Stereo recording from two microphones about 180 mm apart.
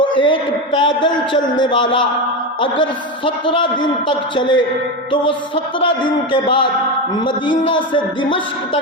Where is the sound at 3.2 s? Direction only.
25° left (ahead or behind).